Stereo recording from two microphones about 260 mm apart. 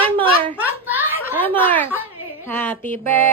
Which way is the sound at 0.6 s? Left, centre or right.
Centre.